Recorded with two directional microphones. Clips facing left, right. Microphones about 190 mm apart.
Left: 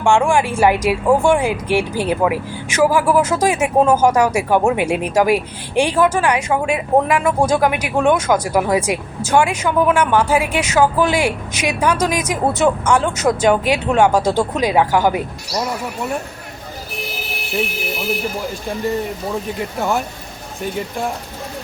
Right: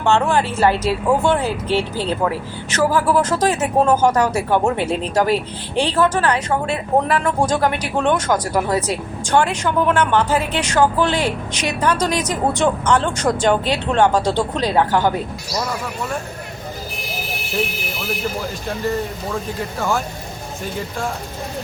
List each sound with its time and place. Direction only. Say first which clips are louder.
0.0 s speech: left 2 dB; 10° left (ahead or behind)